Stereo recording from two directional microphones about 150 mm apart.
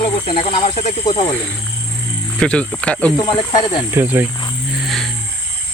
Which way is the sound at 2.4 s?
5° left (ahead or behind).